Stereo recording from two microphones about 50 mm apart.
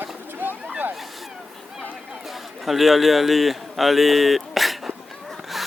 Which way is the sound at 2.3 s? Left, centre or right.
Centre.